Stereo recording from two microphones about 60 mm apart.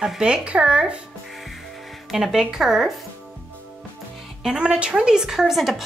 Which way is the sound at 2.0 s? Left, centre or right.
Centre.